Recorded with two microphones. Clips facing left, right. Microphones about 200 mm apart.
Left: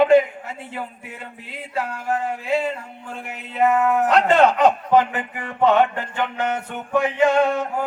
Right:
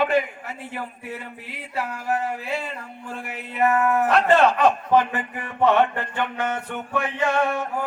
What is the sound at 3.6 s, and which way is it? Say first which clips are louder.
Speech: left 2 dB; 20° left (ahead or behind).